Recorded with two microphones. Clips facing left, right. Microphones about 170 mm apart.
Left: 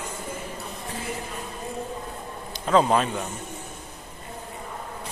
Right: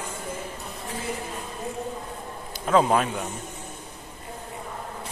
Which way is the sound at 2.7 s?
5° right (ahead or behind).